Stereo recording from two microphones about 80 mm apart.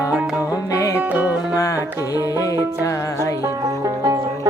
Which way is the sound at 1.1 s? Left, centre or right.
Centre.